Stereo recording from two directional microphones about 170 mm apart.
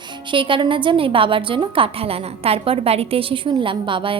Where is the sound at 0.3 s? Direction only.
30° right (ahead or behind).